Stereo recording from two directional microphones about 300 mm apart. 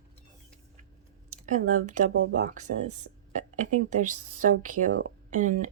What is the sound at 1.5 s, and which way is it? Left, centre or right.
Speech, right.